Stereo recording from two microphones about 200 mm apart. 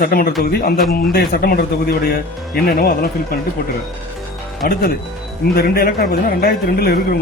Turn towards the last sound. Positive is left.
turn(degrees=50)  # may be behind; listen again after turning